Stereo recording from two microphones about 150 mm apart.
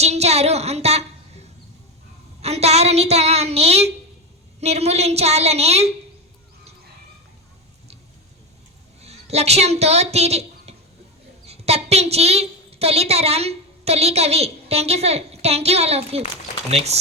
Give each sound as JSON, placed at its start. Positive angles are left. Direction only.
{"t": 0.0, "sound": "a sound", "side_deg": -45}
{"t": 4.6, "sound": "a woman's voice", "side_deg": -45}
{"t": 9.0, "sound": "a woman's voice", "side_deg": -45}